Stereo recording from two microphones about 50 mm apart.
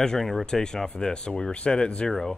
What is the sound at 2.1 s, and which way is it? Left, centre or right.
Speech, centre.